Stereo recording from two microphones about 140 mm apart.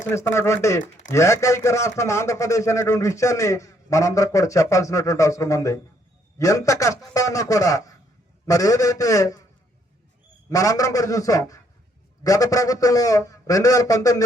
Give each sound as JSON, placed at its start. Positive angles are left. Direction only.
{"t": 0.1, "sound": "a man's voice", "side_deg": 20}
{"t": 10.5, "sound": "a man's voice", "side_deg": 25}